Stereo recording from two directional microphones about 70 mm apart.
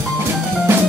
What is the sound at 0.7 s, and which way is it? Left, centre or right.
Music, right.